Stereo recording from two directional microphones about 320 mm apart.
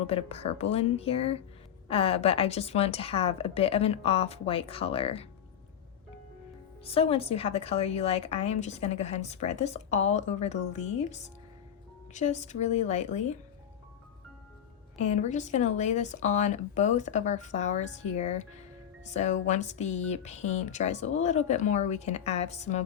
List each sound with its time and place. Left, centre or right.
0.0 s a woman's voice: centre
6.8 s a woman's voice: centre
15.0 s a woman's voice: left